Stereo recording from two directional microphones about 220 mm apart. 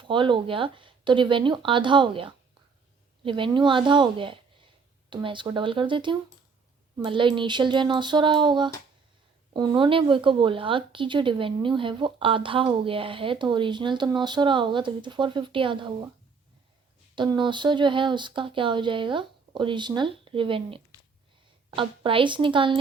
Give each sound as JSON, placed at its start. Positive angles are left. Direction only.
{"t": 0.0, "sound": "speech", "side_deg": -20}
{"t": 17.2, "sound": "speech", "side_deg": -20}